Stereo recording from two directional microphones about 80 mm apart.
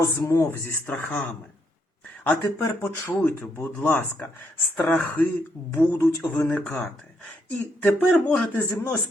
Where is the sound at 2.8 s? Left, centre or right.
Left.